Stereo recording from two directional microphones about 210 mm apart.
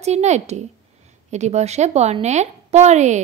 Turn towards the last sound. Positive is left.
turn(degrees=-35)  # may be behind; listen again after turning